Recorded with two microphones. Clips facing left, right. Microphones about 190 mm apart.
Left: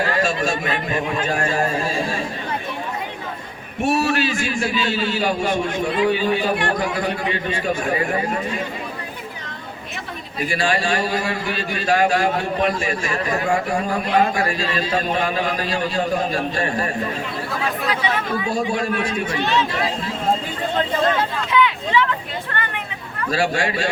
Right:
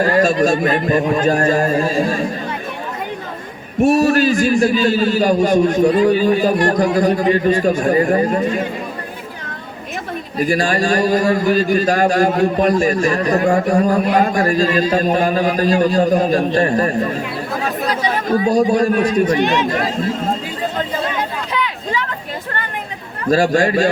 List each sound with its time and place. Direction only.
0.0 s a man's voice: 40° right (ahead or behind)
3.8 s a man's voice: 40° right (ahead or behind)
10.3 s a man's voice: 45° right (ahead or behind)
19.4 s speech: 15° right (ahead or behind)
19.7 s speech: 45° right (ahead or behind)
21.5 s a sound: 40° right (ahead or behind)
23.3 s a man's voice: 40° right (ahead or behind)